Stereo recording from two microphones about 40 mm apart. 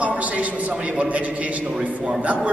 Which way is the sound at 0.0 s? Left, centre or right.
Right.